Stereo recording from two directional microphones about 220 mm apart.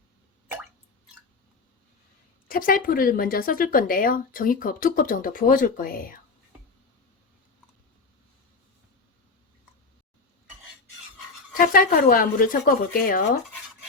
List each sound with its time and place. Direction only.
2.5 s speech: 40° left (ahead or behind)
11.5 s speech: 40° left (ahead or behind)